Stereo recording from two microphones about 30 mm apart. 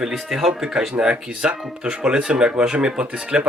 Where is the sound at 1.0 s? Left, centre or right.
Right.